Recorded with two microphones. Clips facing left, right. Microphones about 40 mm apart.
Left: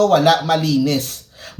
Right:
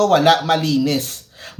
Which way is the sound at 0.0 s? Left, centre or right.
Right.